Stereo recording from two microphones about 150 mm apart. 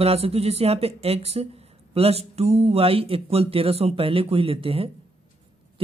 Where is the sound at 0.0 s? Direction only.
40° right (ahead or behind).